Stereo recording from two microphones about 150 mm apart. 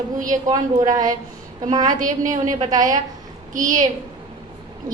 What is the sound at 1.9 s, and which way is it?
Speech, 60° right (ahead or behind).